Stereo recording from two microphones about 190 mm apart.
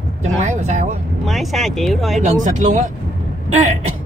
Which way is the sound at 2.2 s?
40° right (ahead or behind).